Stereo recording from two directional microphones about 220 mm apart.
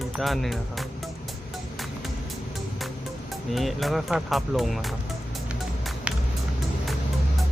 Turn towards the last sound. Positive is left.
turn(degrees=-5)  # may be behind; listen again after turning